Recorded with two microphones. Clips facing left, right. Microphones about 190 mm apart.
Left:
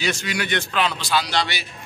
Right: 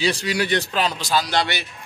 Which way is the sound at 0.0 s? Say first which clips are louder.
Right 3 dB; 35° right (ahead or behind).